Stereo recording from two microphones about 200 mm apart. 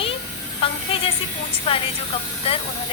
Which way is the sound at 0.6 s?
25° left (ahead or behind).